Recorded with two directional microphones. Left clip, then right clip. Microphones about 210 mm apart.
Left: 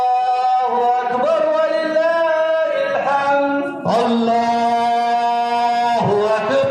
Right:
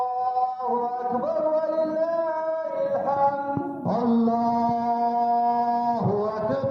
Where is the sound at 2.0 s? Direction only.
90° left.